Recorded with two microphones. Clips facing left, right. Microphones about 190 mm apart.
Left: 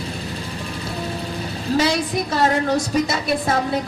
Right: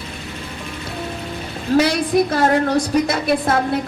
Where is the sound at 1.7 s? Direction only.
55° right (ahead or behind).